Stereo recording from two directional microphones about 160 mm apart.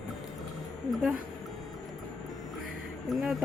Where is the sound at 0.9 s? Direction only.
5° right (ahead or behind).